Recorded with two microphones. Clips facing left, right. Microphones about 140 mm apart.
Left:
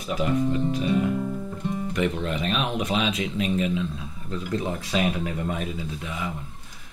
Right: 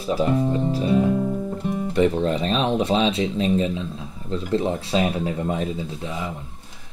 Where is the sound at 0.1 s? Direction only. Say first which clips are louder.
Right 3 dB; 30° right (ahead or behind).